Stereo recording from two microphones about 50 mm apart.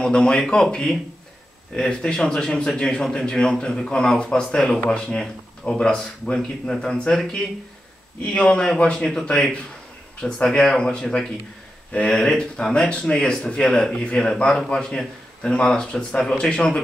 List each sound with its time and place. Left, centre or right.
0.0 s a man's voice: centre
8.2 s a man's voice: left